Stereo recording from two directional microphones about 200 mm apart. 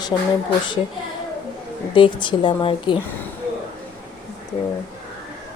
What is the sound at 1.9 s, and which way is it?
Speech, 25° left (ahead or behind).